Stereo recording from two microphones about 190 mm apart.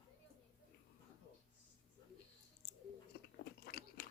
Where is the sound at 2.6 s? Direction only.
60° left (ahead or behind).